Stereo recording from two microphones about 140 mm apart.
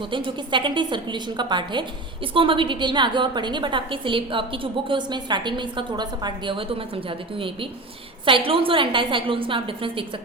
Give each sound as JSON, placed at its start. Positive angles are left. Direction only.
{"t": 0.0, "sound": "a woman's voice", "side_deg": -35}